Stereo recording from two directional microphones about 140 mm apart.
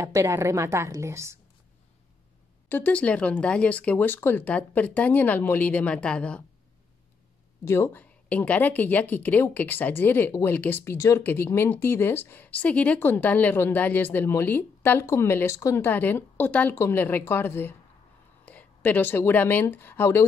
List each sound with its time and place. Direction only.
0.0 s a woman's voice: 20° right (ahead or behind)
2.7 s speech: 10° left (ahead or behind)
7.6 s speech: 20° left (ahead or behind)